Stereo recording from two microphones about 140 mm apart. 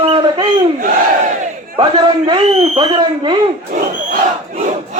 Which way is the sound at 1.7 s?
35° right (ahead or behind).